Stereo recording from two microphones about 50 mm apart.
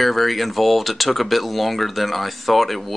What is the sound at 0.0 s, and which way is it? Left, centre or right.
Speech, centre.